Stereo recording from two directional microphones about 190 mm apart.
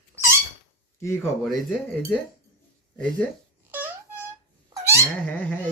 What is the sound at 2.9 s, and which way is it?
Speech, 5° left (ahead or behind).